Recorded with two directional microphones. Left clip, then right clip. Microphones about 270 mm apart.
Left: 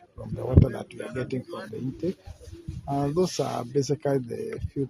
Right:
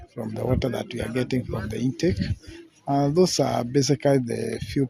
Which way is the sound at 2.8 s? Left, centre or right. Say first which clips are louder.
Right 5 dB; right.